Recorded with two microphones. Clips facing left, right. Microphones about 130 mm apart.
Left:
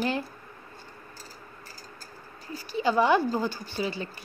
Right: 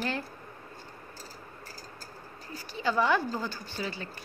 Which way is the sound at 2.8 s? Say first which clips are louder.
Left 4 dB; 15° left (ahead or behind).